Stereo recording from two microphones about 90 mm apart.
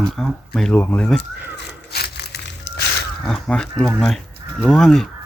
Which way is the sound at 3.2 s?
10° left (ahead or behind).